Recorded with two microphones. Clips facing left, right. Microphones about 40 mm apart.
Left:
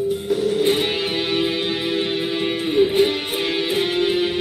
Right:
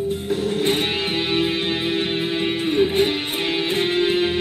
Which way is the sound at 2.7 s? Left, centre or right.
Centre.